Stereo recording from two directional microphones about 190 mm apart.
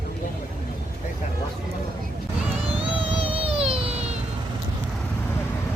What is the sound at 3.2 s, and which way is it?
Baby cry, 30° right (ahead or behind).